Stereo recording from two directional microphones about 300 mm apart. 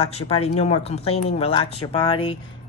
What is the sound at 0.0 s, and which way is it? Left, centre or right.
A woman's voice, centre.